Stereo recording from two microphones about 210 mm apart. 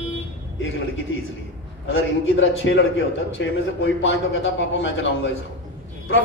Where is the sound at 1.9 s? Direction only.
70° left (ahead or behind).